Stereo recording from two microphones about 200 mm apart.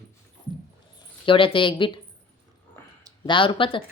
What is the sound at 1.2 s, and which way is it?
Speech, 25° left (ahead or behind).